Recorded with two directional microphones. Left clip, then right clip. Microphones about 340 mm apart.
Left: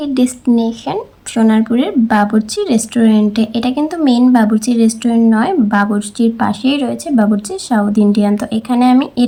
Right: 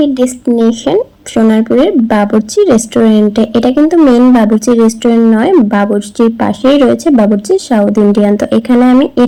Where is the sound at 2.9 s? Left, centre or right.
Left.